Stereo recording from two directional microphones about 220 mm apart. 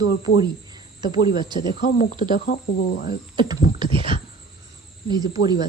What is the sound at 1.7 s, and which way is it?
Speech, 35° left (ahead or behind).